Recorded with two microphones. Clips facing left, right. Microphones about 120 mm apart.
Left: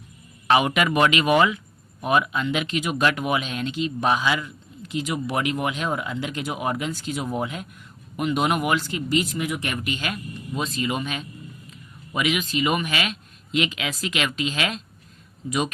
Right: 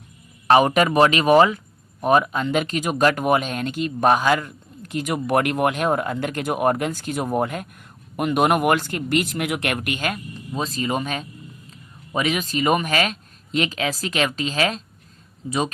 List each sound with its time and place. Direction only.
0.4 s speech: 40° right (ahead or behind)
10.5 s speech: 35° right (ahead or behind)